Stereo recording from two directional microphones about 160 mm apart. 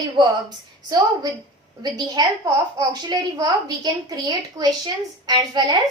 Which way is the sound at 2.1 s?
25° right (ahead or behind).